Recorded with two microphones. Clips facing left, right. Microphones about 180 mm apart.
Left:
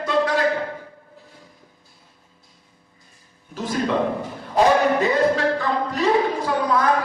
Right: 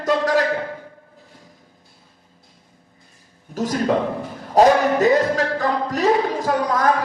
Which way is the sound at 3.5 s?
45° right (ahead or behind).